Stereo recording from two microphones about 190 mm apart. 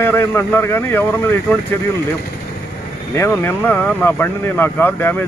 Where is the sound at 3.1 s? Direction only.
15° left (ahead or behind).